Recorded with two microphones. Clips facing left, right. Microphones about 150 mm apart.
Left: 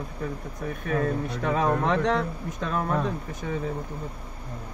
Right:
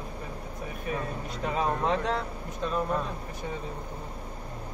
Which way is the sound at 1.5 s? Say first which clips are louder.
Left 4 dB; 65° left (ahead or behind).